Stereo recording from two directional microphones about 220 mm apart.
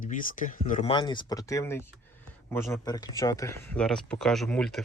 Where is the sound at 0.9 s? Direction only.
20° left (ahead or behind).